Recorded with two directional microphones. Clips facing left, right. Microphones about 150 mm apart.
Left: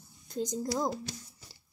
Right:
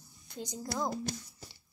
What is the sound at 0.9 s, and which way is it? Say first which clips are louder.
Speech: right 2 dB; 45° right (ahead or behind).